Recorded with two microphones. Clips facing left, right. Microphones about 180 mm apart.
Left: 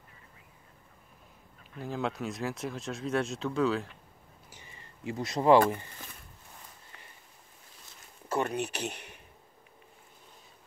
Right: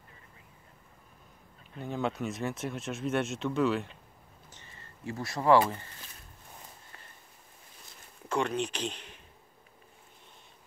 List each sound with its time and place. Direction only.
1.8 s speech: centre (ahead or behind)
4.5 s a sound: 10° left (ahead or behind)
8.3 s speech: 10° left (ahead or behind)